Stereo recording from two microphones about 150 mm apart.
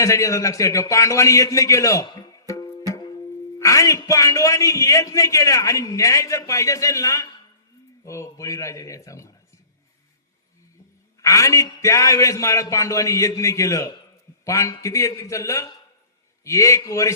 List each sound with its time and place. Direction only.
0.0 s a man's voice: 20° left (ahead or behind)
11.2 s a man's voice: 20° left (ahead or behind)